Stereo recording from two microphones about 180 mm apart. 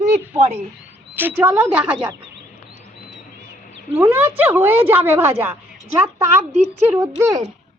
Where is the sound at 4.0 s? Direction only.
15° right (ahead or behind).